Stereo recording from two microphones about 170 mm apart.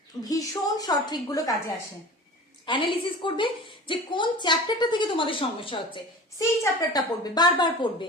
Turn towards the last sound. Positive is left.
turn(degrees=25)  # may be behind; listen again after turning